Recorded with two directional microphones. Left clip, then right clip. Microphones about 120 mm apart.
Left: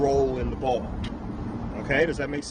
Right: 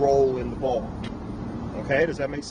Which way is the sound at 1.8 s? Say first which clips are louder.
Right 1 dB; 45° left (ahead or behind).